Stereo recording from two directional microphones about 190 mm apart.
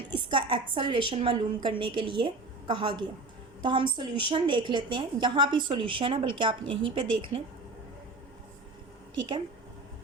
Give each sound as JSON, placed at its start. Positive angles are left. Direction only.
{"t": 0.3, "sound": "a woman's voice", "side_deg": -25}